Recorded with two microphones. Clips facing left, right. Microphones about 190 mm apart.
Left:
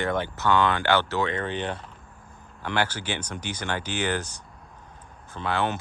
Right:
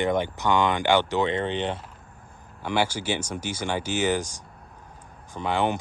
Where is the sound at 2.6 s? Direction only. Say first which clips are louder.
Right 2 dB; 10° right (ahead or behind).